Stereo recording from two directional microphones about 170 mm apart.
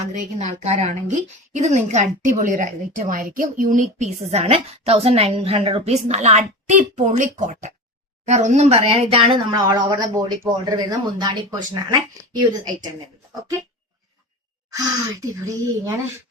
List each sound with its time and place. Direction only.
0.1 s a woman's voice: 45° right (ahead or behind); by 12.9 s 25° right (ahead or behind)
15.2 s speech: 20° right (ahead or behind)